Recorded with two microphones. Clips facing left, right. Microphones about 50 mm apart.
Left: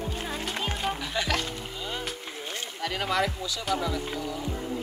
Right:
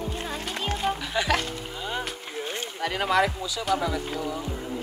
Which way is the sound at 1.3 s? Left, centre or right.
Centre.